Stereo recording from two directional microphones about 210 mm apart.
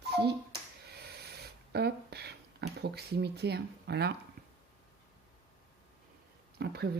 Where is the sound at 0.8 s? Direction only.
50° right (ahead or behind).